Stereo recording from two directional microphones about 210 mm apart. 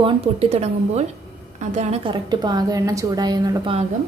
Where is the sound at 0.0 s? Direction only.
30° right (ahead or behind).